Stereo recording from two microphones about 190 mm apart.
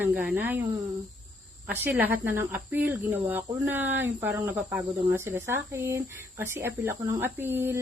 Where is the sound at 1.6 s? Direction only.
10° right (ahead or behind).